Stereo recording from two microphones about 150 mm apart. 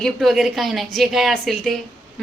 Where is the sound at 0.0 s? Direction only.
Centre (ahead or behind).